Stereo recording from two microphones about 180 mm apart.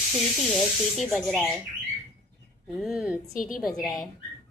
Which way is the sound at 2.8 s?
5° right (ahead or behind).